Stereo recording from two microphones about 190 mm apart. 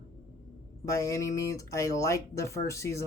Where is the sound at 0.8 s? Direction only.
15° left (ahead or behind).